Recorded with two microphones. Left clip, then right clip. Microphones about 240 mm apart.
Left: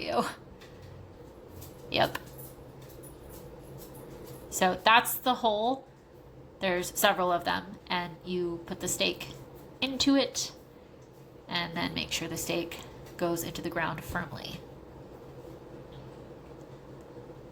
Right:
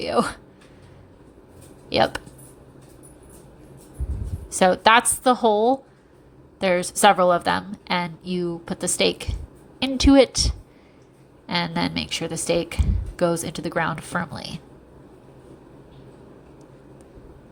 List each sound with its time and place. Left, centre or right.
0.0 s speech: right
1.9 s a woman's voice: right
4.4 s a woman's voice: right